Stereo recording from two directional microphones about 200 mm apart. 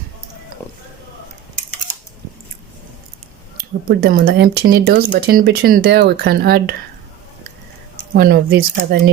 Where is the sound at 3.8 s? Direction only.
50° right (ahead or behind).